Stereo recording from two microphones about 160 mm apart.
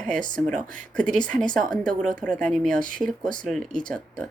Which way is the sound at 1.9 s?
55° right (ahead or behind).